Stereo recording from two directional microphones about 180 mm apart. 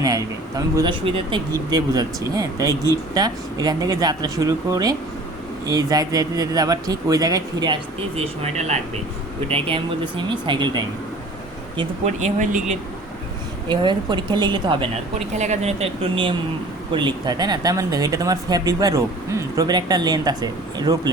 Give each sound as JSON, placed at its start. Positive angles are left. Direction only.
{"t": 0.0, "sound": "speech", "side_deg": -20}
{"t": 12.0, "sound": "speech", "side_deg": -40}
{"t": 13.7, "sound": "speech", "side_deg": -25}
{"t": 15.3, "sound": "speech", "side_deg": -40}